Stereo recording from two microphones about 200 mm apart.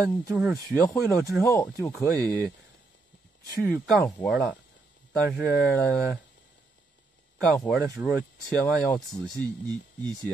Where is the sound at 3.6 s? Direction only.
5° left (ahead or behind).